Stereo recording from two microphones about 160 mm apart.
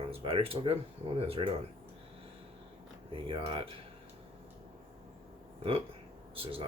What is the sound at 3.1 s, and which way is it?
Speech, 30° right (ahead or behind).